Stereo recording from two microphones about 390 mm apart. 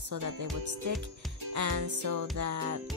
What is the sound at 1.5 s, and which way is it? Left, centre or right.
Music, right.